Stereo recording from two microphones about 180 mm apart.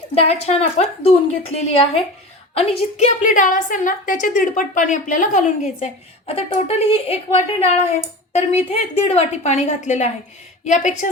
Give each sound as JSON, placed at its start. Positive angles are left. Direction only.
{"t": 0.1, "sound": "a woman's voice", "side_deg": 35}